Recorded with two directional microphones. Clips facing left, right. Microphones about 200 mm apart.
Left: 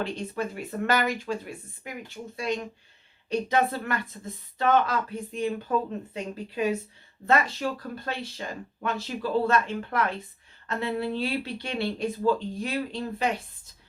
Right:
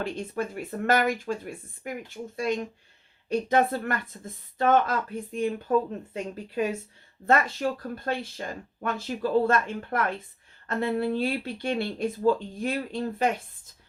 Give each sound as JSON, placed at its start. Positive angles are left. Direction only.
{"t": 0.0, "sound": "speech", "side_deg": -50}